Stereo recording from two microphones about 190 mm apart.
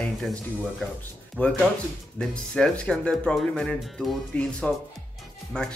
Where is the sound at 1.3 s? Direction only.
5° left (ahead or behind).